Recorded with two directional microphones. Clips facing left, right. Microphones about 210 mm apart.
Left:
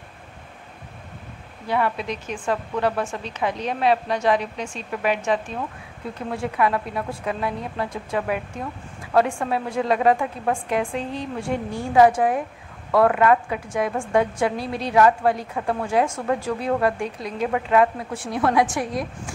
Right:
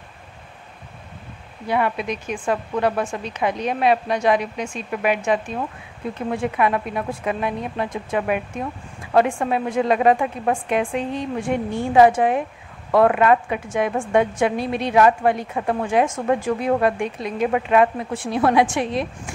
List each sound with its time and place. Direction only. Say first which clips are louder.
1.7 s a woman's voice: right 2 dB; 15° right (ahead or behind)